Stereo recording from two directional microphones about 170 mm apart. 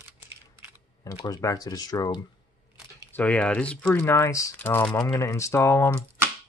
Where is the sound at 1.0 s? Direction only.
20° left (ahead or behind).